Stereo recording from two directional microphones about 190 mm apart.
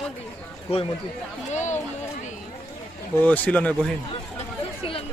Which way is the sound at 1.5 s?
40° left (ahead or behind).